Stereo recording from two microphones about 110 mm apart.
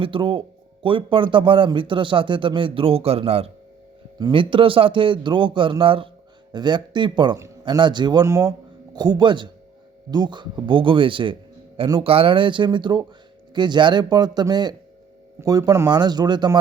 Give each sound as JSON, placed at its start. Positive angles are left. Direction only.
{"t": 0.0, "sound": "speech", "side_deg": -50}
{"t": 4.2, "sound": "speech", "side_deg": -50}
{"t": 6.5, "sound": "speech", "side_deg": -40}
{"t": 15.9, "sound": "speech", "side_deg": -40}